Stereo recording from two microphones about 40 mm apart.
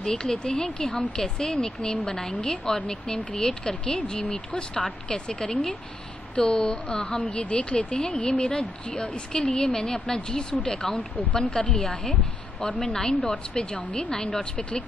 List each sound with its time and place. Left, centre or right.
0.0 s a woman's voice: centre